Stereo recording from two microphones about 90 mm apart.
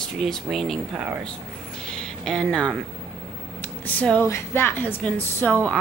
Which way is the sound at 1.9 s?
Centre (ahead or behind).